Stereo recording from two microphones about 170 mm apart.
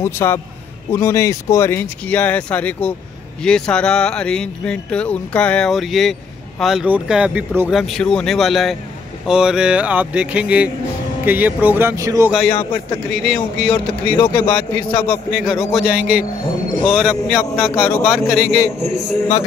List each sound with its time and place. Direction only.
0.0 s speech: 15° left (ahead or behind); by 7.7 s 10° right (ahead or behind)
7.7 s speech: centre (ahead or behind); by 12.3 s 20° right (ahead or behind)
13.1 s speech: centre (ahead or behind)
14.1 s a man's voice: 25° left (ahead or behind)
15.3 s speech: centre (ahead or behind)
15.8 s a man's voice: 60° left (ahead or behind)
16.8 s speech: centre (ahead or behind)
18.8 s a man's voice: 40° right (ahead or behind)